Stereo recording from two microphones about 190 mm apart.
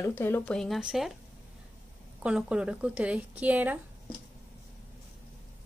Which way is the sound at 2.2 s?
5° right (ahead or behind).